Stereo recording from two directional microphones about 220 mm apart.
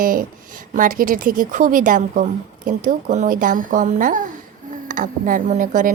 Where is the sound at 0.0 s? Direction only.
40° right (ahead or behind).